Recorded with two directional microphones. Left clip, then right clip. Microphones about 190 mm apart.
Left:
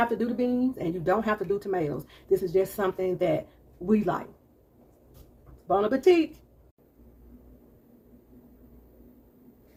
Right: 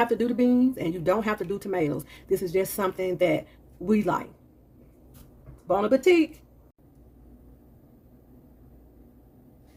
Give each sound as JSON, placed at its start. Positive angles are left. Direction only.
{"t": 0.0, "sound": "speech", "side_deg": -50}
{"t": 5.6, "sound": "speech", "side_deg": -45}